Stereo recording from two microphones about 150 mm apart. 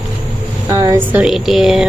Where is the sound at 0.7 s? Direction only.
25° right (ahead or behind).